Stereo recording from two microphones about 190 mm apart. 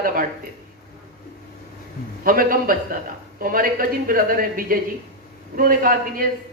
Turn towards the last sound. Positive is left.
turn(degrees=-45)  # may be behind; listen again after turning